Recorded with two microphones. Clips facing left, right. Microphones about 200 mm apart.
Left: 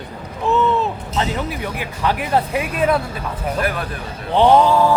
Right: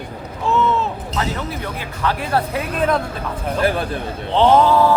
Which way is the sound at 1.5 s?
15° left (ahead or behind).